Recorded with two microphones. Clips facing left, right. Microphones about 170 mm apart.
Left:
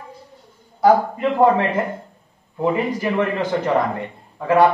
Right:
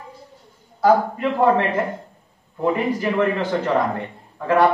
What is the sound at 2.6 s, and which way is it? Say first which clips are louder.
Speech: even; 15° left (ahead or behind).